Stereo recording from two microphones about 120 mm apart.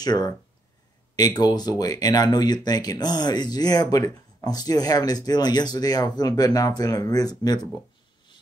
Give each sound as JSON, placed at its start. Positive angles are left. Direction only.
{"t": 0.0, "sound": "speech", "side_deg": 35}